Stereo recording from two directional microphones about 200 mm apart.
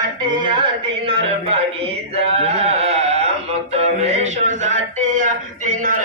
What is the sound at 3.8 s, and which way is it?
A man's voice, 35° right (ahead or behind).